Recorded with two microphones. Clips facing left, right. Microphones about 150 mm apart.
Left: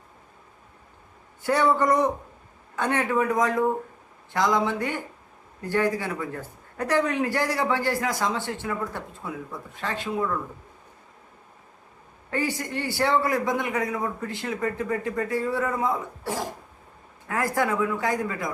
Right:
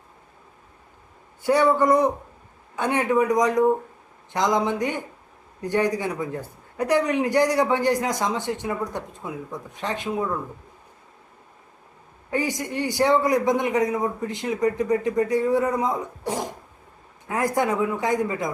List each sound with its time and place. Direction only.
1.5 s a man's voice: 10° right (ahead or behind)
12.3 s a man's voice: 15° right (ahead or behind)